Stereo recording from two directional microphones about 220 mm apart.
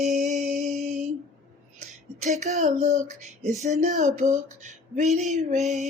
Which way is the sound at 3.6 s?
30° right (ahead or behind).